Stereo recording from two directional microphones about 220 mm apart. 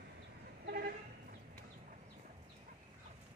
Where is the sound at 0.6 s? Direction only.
45° right (ahead or behind).